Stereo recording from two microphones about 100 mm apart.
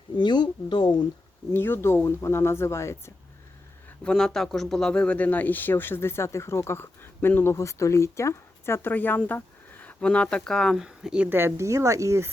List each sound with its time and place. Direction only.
0.2 s speech: 45° left (ahead or behind)
1.5 s speech: 20° left (ahead or behind)
4.0 s speech: 5° left (ahead or behind)
10.8 s speech: 5° right (ahead or behind)
11.3 s a woman's voice: 25° right (ahead or behind)